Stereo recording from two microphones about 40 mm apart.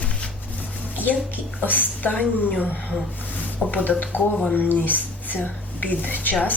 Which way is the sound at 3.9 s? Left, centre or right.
Left.